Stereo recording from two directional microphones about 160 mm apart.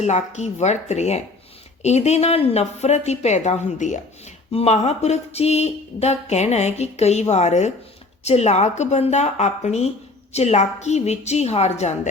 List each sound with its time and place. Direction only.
0.0 s speech: 45° left (ahead or behind)